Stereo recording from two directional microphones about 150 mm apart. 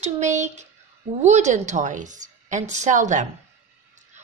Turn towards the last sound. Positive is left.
turn(degrees=-55)  # may be behind; listen again after turning